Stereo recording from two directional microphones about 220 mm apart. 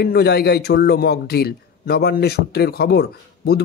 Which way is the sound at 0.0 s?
45° left (ahead or behind).